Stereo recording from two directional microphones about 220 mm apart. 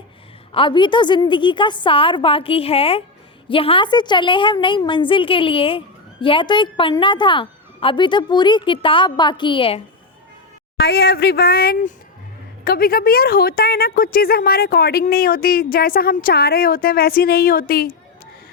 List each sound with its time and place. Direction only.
0.5 s a woman's voice: 20° left (ahead or behind)
10.8 s a woman's voice: 45° left (ahead or behind)